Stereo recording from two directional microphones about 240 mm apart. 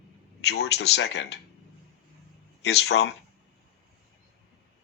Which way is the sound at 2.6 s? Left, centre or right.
Left.